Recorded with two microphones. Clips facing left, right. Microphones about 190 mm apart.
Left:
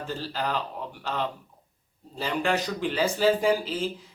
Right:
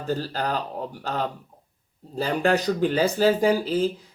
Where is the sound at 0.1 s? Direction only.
40° right (ahead or behind).